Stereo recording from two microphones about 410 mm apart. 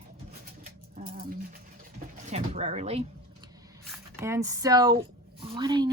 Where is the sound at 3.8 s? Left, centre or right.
Centre.